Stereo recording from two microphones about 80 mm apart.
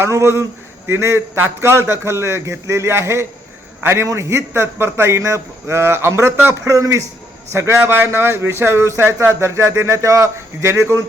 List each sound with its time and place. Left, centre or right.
0.0 s speech: right